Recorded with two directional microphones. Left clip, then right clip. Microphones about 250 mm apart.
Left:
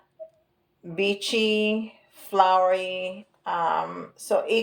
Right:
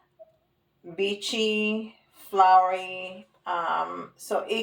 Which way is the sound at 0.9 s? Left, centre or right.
Left.